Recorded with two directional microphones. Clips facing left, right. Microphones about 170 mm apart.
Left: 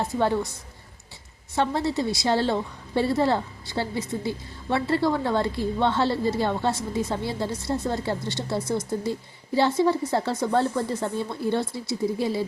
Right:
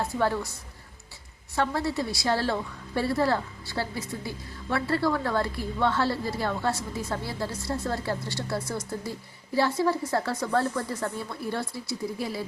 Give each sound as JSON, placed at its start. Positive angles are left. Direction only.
{"t": 0.0, "sound": "a woman's voice", "side_deg": 20}
{"t": 1.5, "sound": "a woman's voice", "side_deg": 25}